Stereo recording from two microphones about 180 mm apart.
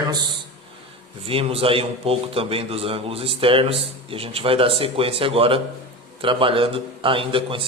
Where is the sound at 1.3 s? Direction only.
30° right (ahead or behind).